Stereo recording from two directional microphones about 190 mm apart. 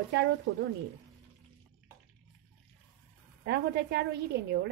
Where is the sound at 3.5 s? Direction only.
60° right (ahead or behind).